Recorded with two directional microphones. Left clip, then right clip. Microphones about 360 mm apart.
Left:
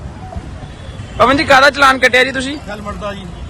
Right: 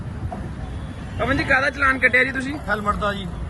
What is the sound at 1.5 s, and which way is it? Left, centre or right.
Speech, left.